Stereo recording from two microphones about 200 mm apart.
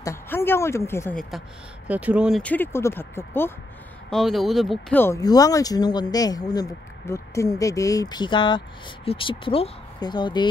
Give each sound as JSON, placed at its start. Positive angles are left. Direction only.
{"t": 0.0, "sound": "a woman's voice", "side_deg": 15}
{"t": 1.9, "sound": "speech", "side_deg": -5}
{"t": 4.1, "sound": "speech", "side_deg": 0}